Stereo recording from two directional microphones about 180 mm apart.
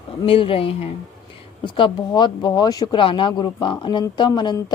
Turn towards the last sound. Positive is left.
turn(degrees=25)  # may be behind; listen again after turning